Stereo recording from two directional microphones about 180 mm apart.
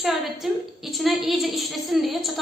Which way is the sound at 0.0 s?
Centre (ahead or behind).